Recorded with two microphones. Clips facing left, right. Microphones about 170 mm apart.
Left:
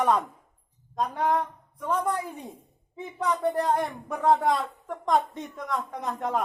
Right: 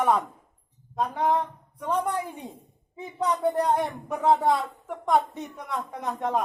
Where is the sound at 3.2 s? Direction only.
20° right (ahead or behind).